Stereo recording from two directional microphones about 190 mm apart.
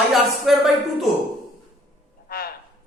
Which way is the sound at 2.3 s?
55° left (ahead or behind).